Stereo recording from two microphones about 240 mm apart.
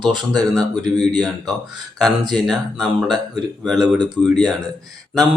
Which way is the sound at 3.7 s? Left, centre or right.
Centre.